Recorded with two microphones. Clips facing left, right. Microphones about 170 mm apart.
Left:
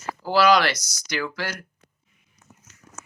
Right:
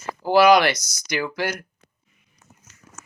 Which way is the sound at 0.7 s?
50° right (ahead or behind).